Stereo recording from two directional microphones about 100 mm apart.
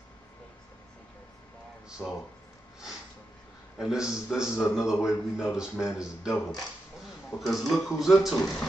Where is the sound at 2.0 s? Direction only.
15° left (ahead or behind).